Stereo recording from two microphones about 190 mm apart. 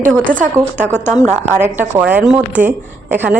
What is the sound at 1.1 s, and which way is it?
Speech, 15° left (ahead or behind).